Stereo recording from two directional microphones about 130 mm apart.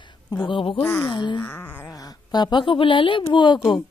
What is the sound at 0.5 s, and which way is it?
Speech, 40° left (ahead or behind).